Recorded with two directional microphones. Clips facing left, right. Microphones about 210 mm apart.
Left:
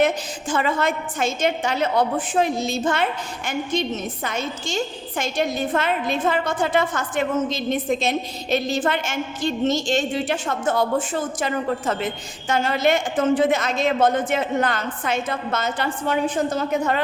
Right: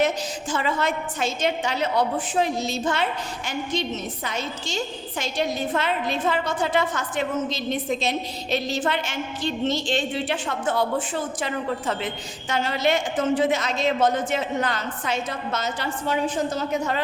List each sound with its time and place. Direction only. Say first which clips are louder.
0.5 s a woman's voice: left 3 dB; 50° left (ahead or behind)